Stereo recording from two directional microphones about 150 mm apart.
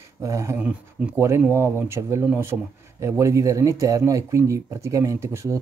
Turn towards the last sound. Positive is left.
turn(degrees=-20)  # may be behind; listen again after turning